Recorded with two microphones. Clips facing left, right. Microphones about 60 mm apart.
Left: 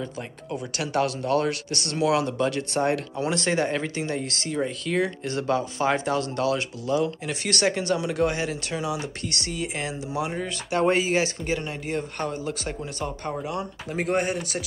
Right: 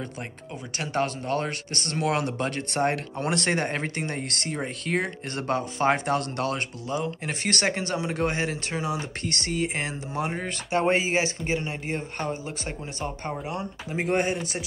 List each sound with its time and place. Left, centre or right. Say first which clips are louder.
0.7 s speech: left 2 dB; right
10.7 s speech: left 1 dB; right